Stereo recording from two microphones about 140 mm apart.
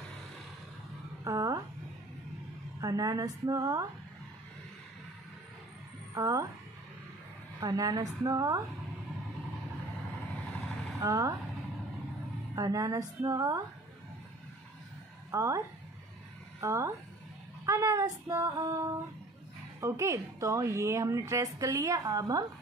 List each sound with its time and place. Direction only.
1.2 s a sound: 25° right (ahead or behind)
2.8 s a woman's voice: 25° right (ahead or behind)
6.1 s speech: 25° right (ahead or behind)
7.6 s a woman's voice: 25° right (ahead or behind)
11.0 s a woman's voice: 25° right (ahead or behind)
12.5 s a woman's voice: 25° right (ahead or behind)
15.3 s a woman's voice: 20° right (ahead or behind)
16.6 s a woman's voice: 20° right (ahead or behind)